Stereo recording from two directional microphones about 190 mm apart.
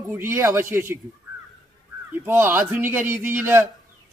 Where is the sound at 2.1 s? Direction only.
10° right (ahead or behind).